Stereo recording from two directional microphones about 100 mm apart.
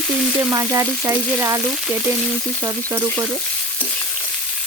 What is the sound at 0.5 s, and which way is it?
Frying, 30° right (ahead or behind).